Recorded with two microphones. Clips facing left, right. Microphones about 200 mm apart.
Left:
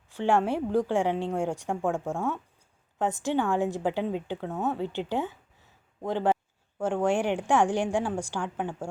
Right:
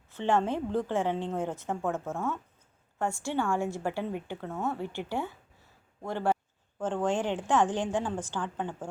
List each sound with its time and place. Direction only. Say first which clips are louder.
0.1 s a woman's voice: left 3 dB; 10° left (ahead or behind)